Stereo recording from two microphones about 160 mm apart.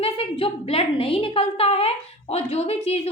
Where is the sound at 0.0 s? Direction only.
35° left (ahead or behind).